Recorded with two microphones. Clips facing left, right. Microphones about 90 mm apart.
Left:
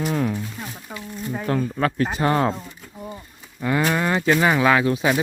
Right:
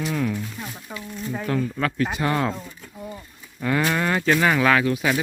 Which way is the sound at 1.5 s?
35° left (ahead or behind).